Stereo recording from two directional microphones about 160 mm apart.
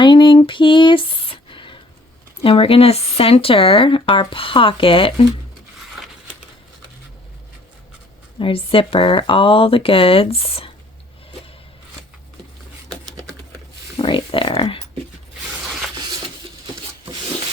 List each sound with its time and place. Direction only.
0.0 s a sound: 30° left (ahead or behind)
2.4 s speech: 35° left (ahead or behind)
8.4 s speech: 35° left (ahead or behind)
13.9 s speech: 30° left (ahead or behind)